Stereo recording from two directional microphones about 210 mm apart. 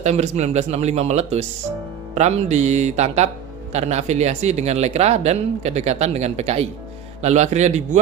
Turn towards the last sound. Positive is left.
turn(degrees=-35)  # may be behind; listen again after turning